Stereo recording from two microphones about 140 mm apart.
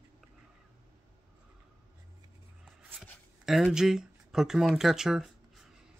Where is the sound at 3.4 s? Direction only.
Centre (ahead or behind).